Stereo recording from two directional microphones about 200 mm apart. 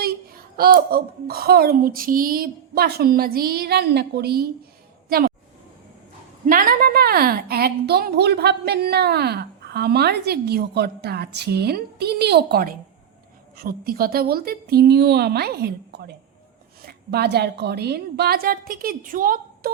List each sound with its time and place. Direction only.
0.0 s a woman's voice: 50° right (ahead or behind)
6.4 s a woman's voice: 45° right (ahead or behind)